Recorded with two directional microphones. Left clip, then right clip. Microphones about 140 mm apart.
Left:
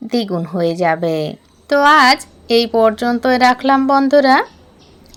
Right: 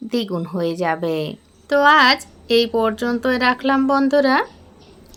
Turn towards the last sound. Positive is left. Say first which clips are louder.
# left 5 dB
turn(degrees=30)  # may be behind; listen again after turning